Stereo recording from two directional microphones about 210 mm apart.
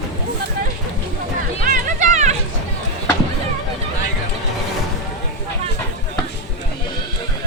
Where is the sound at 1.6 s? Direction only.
35° right (ahead or behind).